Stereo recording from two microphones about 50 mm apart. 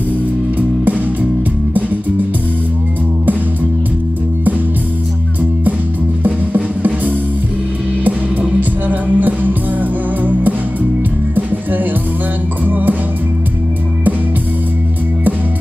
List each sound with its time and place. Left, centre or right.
1.7 s music: right
6.2 s music: right
8.0 s music: right